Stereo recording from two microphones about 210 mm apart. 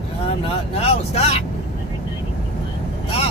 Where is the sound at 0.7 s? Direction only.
30° left (ahead or behind).